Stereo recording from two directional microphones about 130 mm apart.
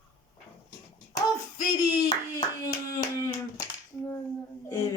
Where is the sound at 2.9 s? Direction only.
25° left (ahead or behind).